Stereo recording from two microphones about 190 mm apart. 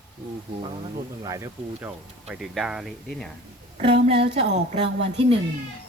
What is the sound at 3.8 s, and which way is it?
Speech, 30° right (ahead or behind).